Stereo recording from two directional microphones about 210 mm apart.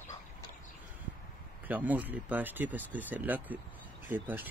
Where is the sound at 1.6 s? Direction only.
10° right (ahead or behind).